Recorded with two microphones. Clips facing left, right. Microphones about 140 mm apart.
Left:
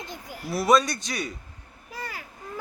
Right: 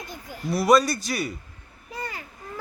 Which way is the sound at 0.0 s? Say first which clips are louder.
Even; 20° left (ahead or behind).